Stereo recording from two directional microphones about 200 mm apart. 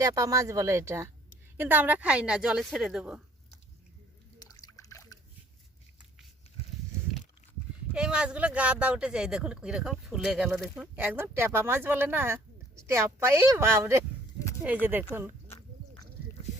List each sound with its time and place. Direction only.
0.0 s a woman's voice: 15° right (ahead or behind)
4.4 s splash: 15° left (ahead or behind)
7.9 s speech: 5° right (ahead or behind)